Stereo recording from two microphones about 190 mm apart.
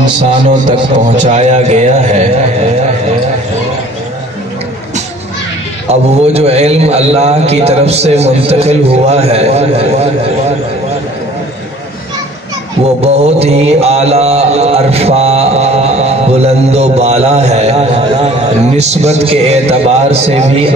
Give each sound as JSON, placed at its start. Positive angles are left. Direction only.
{"t": 1.1, "sound": "a man's voice", "side_deg": -35}
{"t": 5.9, "sound": "a man's voice", "side_deg": -35}
{"t": 12.8, "sound": "mantra", "side_deg": -35}
{"t": 18.8, "sound": "a man's voice", "side_deg": -35}